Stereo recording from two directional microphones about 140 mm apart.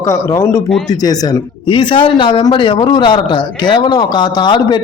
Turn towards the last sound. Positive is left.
turn(degrees=30)  # may be behind; listen again after turning